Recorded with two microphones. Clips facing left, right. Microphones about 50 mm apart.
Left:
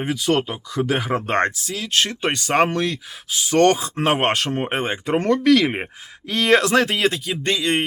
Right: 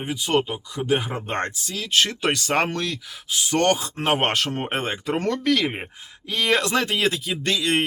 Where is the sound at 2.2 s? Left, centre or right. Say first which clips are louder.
Left 3 dB; left.